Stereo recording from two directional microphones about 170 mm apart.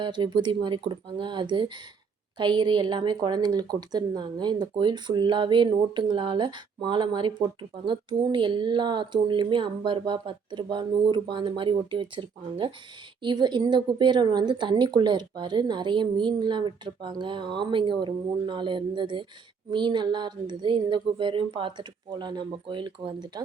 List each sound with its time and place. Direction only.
0.0 s a woman's voice: 30° right (ahead or behind)